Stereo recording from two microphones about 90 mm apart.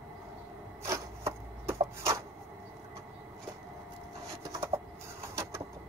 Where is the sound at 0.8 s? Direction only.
35° right (ahead or behind).